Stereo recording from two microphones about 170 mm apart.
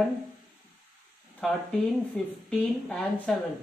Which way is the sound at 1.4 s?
5° left (ahead or behind).